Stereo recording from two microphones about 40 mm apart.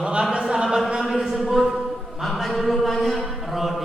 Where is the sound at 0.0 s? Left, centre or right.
Right; by 3.3 s centre.